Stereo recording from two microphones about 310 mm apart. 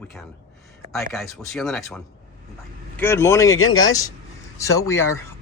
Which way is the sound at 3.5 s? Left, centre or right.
Left.